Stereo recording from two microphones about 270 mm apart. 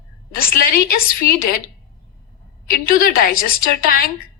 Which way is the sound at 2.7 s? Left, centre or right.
Left.